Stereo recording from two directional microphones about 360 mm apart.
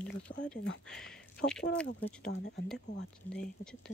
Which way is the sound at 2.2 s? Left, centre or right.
Left.